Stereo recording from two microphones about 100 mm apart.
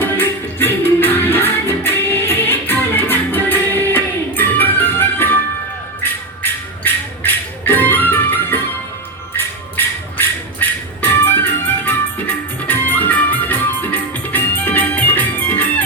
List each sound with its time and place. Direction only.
0.0 s music: 20° left (ahead or behind)